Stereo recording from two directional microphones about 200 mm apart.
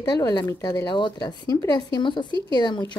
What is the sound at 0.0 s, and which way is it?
Speech, 20° left (ahead or behind).